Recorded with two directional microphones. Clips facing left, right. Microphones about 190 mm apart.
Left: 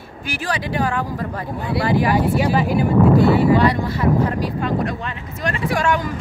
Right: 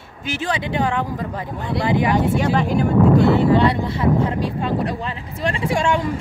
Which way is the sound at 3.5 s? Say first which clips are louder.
Even; 25° right (ahead or behind).